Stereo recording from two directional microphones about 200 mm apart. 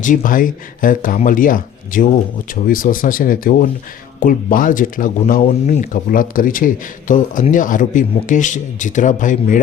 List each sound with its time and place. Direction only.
0.0 s speech: 40° left (ahead or behind)